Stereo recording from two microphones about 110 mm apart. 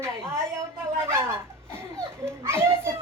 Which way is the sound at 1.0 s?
20° right (ahead or behind).